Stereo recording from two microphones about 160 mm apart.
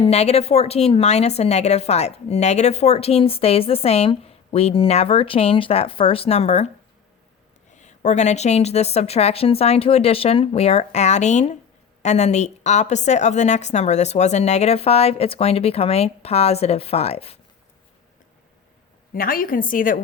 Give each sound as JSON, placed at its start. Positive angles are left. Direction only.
{"t": 0.0, "sound": "a woman's voice", "side_deg": 40}
{"t": 7.7, "sound": "a woman's voice", "side_deg": 45}
{"t": 19.1, "sound": "a woman's voice", "side_deg": 65}